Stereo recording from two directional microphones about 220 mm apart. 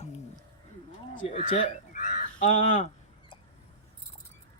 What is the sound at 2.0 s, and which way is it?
Crow, 35° left (ahead or behind).